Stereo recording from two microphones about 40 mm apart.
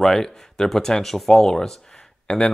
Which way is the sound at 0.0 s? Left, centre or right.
Centre.